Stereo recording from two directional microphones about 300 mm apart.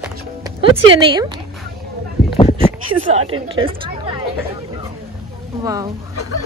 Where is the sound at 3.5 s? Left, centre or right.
Centre.